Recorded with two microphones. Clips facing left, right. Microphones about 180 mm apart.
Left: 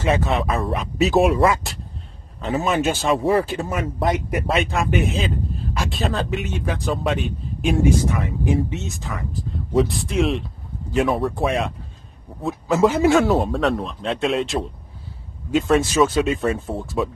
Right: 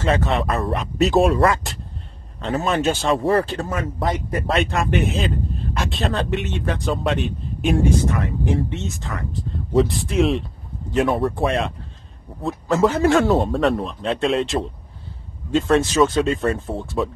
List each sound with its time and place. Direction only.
0.0 s a man's voice: 15° left (ahead or behind)
0.3 s speech: centre (ahead or behind)
3.6 s a man's voice: 15° left (ahead or behind)
4.5 s a man's voice: centre (ahead or behind)
13.2 s speech: centre (ahead or behind)